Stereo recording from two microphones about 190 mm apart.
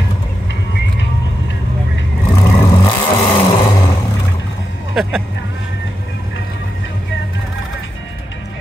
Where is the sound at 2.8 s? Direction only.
25° left (ahead or behind).